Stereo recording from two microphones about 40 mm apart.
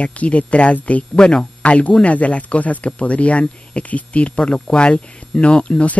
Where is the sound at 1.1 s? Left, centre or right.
Centre.